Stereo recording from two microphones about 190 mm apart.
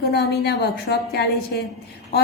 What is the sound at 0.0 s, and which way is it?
Speech, 55° left (ahead or behind).